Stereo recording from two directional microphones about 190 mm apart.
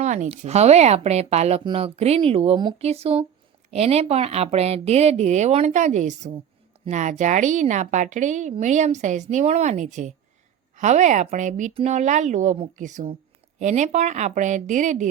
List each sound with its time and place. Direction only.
0.0 s a woman's voice: 40° right (ahead or behind)